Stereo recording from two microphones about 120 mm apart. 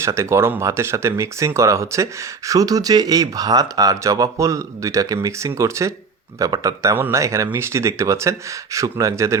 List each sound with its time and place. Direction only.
0.0 s speech: 25° right (ahead or behind)